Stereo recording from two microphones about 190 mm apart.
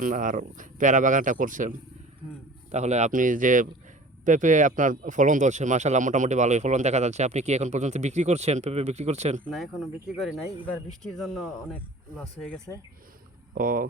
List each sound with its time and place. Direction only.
0.0 s speech: 45° right (ahead or behind)
2.7 s speech: 35° right (ahead or behind)
11.0 s speech: centre (ahead or behind)
13.5 s speech: 45° right (ahead or behind)